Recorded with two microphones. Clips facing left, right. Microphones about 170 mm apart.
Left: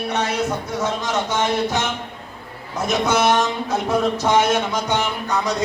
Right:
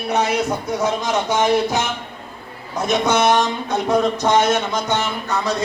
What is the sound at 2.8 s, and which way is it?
Speech, 5° left (ahead or behind).